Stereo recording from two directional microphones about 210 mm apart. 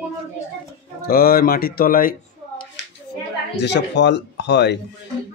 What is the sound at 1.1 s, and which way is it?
Speech, 45° left (ahead or behind).